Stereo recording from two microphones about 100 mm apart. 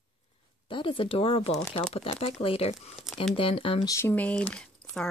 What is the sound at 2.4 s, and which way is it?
Speech, 70° left (ahead or behind).